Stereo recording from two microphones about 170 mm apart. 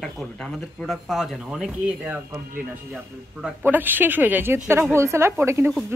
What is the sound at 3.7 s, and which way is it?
A woman's voice, 10° right (ahead or behind).